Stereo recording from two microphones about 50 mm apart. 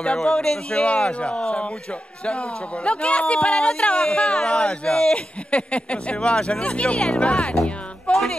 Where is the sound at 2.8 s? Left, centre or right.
Left.